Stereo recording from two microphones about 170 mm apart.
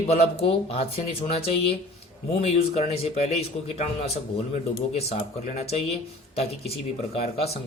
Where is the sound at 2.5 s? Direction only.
35° left (ahead or behind).